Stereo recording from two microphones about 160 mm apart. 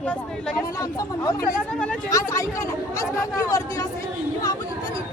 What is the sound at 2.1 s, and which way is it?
Speech, 20° left (ahead or behind).